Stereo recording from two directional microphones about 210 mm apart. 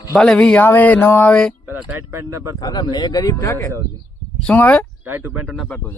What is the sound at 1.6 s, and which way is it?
Speech, 10° right (ahead or behind).